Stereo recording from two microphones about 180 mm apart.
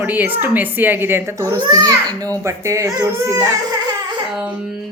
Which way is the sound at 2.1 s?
10° left (ahead or behind).